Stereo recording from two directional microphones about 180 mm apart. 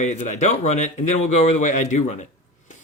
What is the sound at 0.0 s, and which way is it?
Speech, 40° left (ahead or behind).